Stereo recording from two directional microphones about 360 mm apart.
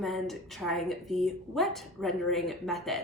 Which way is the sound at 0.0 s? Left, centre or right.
Centre.